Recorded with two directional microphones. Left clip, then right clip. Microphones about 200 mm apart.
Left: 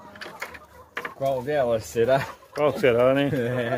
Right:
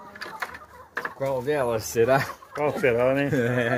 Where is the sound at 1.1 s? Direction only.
40° right (ahead or behind).